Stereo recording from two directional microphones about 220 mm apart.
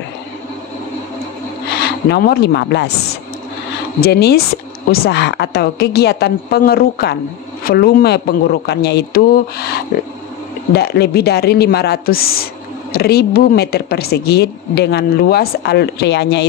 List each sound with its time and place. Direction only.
1.7 s speech: 50° left (ahead or behind)
4.0 s speech: 45° left (ahead or behind)